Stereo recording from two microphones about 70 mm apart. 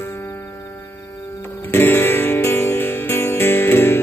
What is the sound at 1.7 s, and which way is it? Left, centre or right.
Music, left.